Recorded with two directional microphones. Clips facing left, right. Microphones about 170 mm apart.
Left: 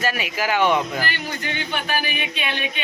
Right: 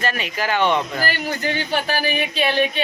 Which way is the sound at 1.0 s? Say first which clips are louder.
Right 5 dB; 40° right (ahead or behind).